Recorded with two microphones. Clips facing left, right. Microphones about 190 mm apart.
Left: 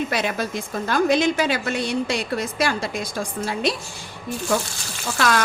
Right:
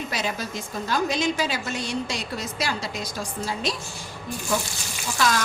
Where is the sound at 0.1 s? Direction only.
60° left (ahead or behind).